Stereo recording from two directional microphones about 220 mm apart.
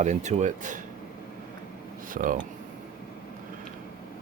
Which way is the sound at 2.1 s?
40° right (ahead or behind).